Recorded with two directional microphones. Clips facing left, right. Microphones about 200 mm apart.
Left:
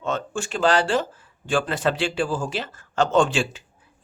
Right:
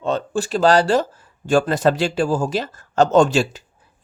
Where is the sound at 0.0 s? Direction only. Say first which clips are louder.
Right 5 dB; 35° right (ahead or behind).